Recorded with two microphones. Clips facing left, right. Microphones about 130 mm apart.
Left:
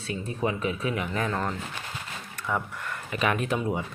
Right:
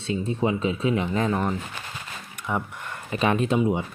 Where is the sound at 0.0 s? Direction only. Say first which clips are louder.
Right 4 dB; 25° right (ahead or behind).